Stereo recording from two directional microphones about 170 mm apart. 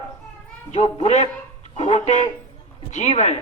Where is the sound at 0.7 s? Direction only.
40° left (ahead or behind).